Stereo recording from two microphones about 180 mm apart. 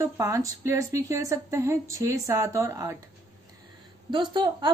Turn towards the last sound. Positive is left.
turn(degrees=-25)  # may be behind; listen again after turning